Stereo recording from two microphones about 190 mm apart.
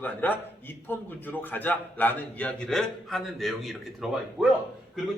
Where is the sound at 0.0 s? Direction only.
10° left (ahead or behind).